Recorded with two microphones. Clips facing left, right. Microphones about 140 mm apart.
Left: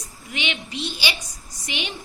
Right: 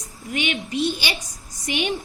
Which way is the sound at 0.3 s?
45° right (ahead or behind).